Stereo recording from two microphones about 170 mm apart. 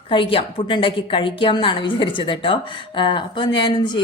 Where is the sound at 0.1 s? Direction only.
30° left (ahead or behind).